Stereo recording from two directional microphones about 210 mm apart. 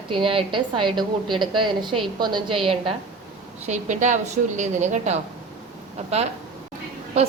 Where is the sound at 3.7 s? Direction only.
35° right (ahead or behind).